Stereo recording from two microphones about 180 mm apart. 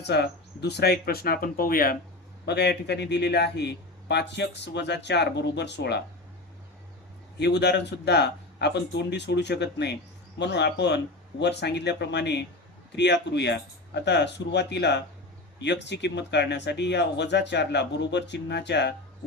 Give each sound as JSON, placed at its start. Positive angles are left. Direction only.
{"t": 0.0, "sound": "speech", "side_deg": 65}
{"t": 2.5, "sound": "speech", "side_deg": 70}
{"t": 7.3, "sound": "speech", "side_deg": 70}